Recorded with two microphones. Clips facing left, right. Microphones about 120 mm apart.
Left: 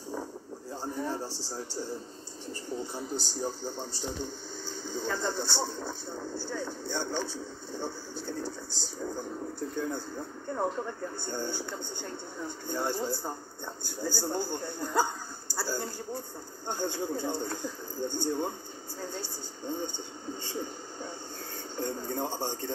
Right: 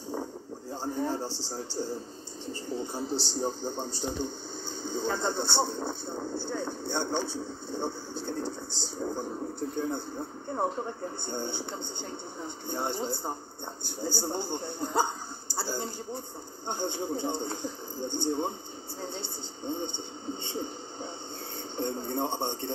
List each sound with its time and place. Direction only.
0.7 s a man's voice: 30° right (ahead or behind)
3.6 s a man's voice: centre (ahead or behind)
5.0 s speech: 25° right (ahead or behind)
11.2 s speech: 20° right (ahead or behind)
15.6 s a sound: 20° right (ahead or behind)
16.6 s speech: 20° right (ahead or behind)